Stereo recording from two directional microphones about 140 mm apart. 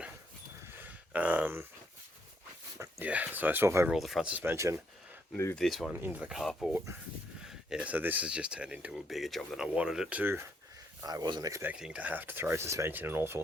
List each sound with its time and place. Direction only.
0.8 s a sound: 10° right (ahead or behind)
2.7 s a sound: 20° right (ahead or behind)
3.1 s speech: 10° right (ahead or behind)
3.8 s speech: centre (ahead or behind); by 4.8 s 20° right (ahead or behind)
5.5 s speech: centre (ahead or behind)
5.9 s speech: 10° right (ahead or behind)
11.0 s speech: 25° right (ahead or behind)
11.6 s speech: 5° right (ahead or behind)